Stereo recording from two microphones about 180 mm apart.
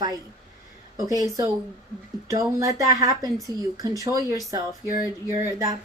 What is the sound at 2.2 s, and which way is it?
Speech, 20° right (ahead or behind).